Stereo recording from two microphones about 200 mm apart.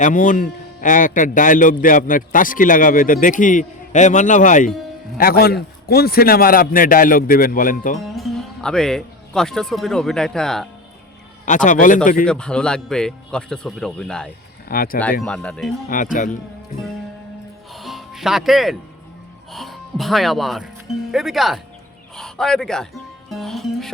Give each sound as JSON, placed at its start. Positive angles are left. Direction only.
{"t": 0.0, "sound": "a man's voice", "side_deg": 40}
{"t": 8.0, "sound": "speech", "side_deg": 0}
{"t": 11.4, "sound": "a man's voice", "side_deg": 40}
{"t": 12.2, "sound": "speech", "side_deg": 5}
{"t": 14.7, "sound": "a man's voice", "side_deg": 45}
{"t": 15.2, "sound": "speech", "side_deg": 5}
{"t": 15.9, "sound": "a man's voice", "side_deg": 40}
{"t": 17.7, "sound": "music", "side_deg": 0}
{"t": 19.5, "sound": "a man's voice", "side_deg": 0}